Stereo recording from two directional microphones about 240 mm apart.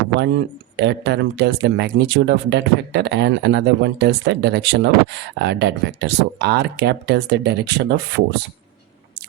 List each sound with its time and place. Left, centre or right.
0.2 s speech: right